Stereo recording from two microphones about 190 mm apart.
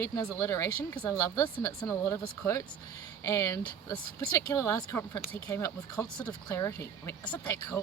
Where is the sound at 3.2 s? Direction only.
10° left (ahead or behind).